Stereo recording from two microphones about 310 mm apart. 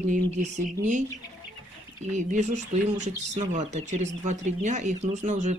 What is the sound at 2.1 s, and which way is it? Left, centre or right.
Speech, right.